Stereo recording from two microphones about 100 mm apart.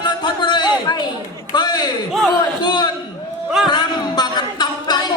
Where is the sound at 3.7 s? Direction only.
45° left (ahead or behind).